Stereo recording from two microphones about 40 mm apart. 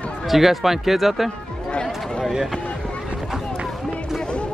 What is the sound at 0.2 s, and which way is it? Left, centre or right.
Speech, centre.